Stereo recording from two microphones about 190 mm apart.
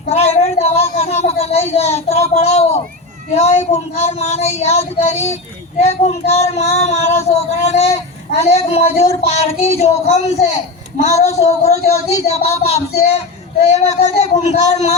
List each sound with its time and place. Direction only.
0.1 s speech: 35° left (ahead or behind)